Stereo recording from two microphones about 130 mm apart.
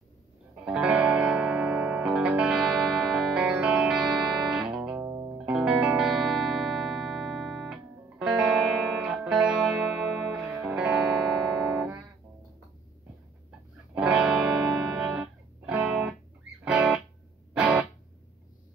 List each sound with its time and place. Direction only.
0.7 s music: 5° right (ahead or behind)
4.5 s guitar: 5° right (ahead or behind)
4.9 s music: 25° right (ahead or behind)
5.5 s music: 5° right (ahead or behind)
13.9 s music: 10° right (ahead or behind)